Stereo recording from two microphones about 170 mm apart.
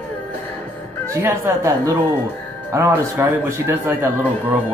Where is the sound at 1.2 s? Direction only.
15° right (ahead or behind).